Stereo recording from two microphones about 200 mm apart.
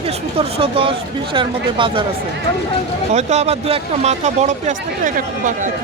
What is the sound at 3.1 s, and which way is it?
Speech, 35° right (ahead or behind).